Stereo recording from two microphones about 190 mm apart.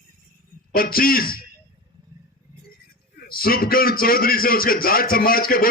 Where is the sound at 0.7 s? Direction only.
50° left (ahead or behind).